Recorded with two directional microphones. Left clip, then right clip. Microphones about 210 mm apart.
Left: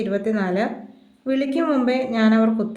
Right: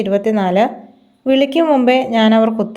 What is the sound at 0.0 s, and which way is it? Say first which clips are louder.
Speech: right 8 dB; 30° right (ahead or behind).